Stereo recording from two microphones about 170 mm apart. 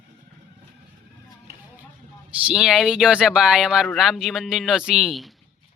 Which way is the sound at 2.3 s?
10° right (ahead or behind).